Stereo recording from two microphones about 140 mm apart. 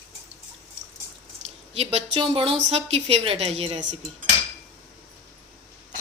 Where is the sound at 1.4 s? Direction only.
45° right (ahead or behind).